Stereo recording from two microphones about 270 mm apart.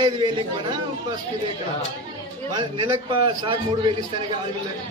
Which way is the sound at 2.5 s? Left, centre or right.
Centre.